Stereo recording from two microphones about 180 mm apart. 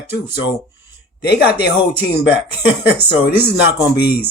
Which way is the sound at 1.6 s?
60° left (ahead or behind).